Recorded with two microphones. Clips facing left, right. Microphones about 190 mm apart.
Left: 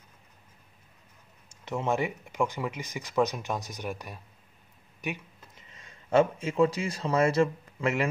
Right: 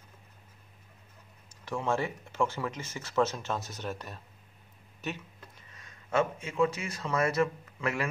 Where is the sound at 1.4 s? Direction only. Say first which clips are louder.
Left 2 dB; 20° left (ahead or behind).